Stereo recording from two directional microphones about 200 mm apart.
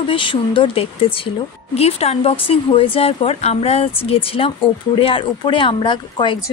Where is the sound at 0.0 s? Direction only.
25° left (ahead or behind).